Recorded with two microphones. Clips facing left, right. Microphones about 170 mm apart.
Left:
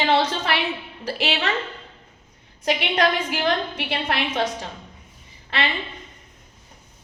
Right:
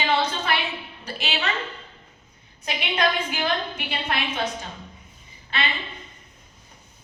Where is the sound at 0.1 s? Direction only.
90° left.